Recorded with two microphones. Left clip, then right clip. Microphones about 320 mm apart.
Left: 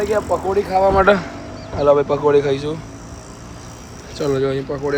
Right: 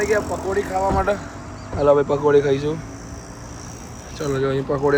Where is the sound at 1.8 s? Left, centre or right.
Centre.